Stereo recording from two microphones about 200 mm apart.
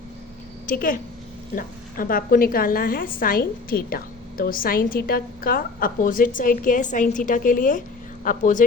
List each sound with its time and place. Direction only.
0.7 s a woman's voice: 45° left (ahead or behind)